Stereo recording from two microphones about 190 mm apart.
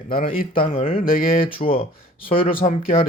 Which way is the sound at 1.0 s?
50° left (ahead or behind).